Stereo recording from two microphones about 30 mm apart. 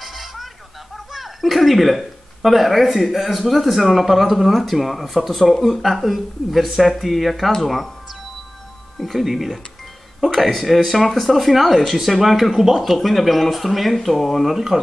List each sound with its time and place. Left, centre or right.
0.0 s music: centre
1.1 s a sound: centre
2.4 s speech: centre
9.0 s speech: centre